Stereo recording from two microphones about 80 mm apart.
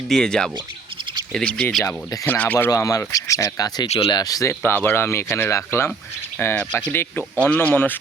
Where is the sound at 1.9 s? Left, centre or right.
Left.